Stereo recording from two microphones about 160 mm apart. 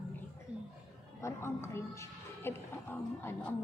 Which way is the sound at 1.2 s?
15° left (ahead or behind).